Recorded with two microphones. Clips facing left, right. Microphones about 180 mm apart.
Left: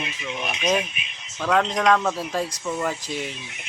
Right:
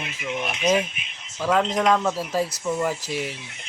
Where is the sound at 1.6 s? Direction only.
10° right (ahead or behind).